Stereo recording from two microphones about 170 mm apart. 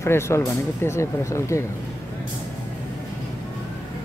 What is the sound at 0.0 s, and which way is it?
Speech, 15° left (ahead or behind).